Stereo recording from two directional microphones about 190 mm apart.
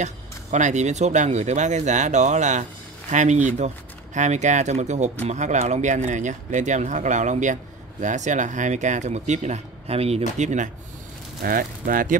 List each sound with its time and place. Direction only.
0.0 s speech: 40° right (ahead or behind)